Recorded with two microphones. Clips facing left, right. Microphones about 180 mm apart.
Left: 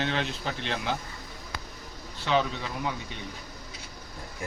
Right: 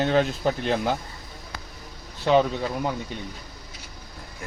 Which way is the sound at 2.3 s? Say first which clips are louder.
Right 7 dB; 45° right (ahead or behind).